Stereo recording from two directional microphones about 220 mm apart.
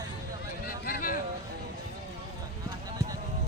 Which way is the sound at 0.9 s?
40° left (ahead or behind).